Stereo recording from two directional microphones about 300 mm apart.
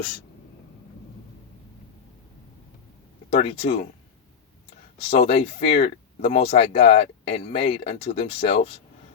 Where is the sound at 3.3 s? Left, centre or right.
Left.